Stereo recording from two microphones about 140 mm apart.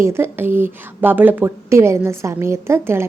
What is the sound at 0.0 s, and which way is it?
A woman's voice, 15° right (ahead or behind).